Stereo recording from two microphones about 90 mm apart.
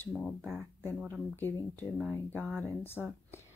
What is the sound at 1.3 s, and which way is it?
Speech, 25° left (ahead or behind).